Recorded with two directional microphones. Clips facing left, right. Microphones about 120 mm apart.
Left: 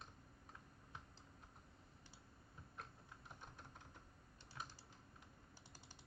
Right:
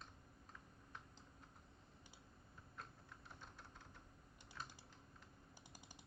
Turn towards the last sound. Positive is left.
turn(degrees=25)  # may be behind; listen again after turning